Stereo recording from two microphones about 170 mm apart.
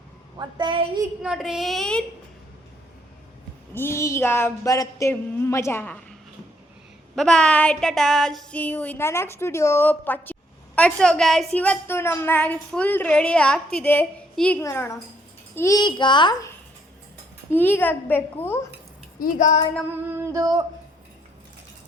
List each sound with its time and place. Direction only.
0.3 s a woman's voice: 25° right (ahead or behind)
1.2 s a child's voice: 5° right (ahead or behind)
3.8 s a woman's voice: 15° left (ahead or behind)
7.2 s a woman's voice: 5° left (ahead or behind); by 16.5 s 25° left (ahead or behind)
17.5 s a woman's voice: 10° left (ahead or behind)
19.2 s a woman's voice: 45° left (ahead or behind)
20.1 s a sound: 20° right (ahead or behind)